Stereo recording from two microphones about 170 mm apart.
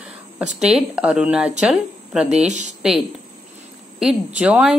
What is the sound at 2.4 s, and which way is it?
Speech, 45° right (ahead or behind).